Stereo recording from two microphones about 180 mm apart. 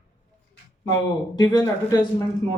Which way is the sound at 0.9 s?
20° left (ahead or behind).